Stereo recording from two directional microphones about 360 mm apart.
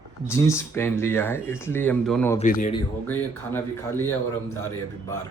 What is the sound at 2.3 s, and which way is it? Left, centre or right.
Speech, left.